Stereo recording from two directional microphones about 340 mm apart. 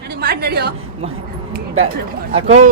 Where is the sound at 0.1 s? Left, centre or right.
Right.